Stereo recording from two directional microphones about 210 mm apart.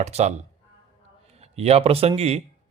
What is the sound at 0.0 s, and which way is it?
Speech, 30° right (ahead or behind).